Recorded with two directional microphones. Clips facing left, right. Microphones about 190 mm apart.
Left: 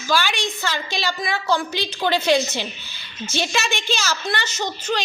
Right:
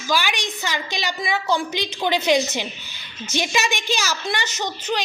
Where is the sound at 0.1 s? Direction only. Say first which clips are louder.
Left 1 dB; 15° right (ahead or behind).